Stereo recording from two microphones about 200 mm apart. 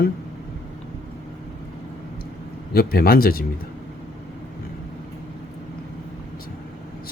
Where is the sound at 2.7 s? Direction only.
50° left (ahead or behind).